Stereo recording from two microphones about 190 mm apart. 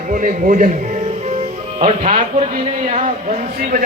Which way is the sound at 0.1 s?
45° right (ahead or behind).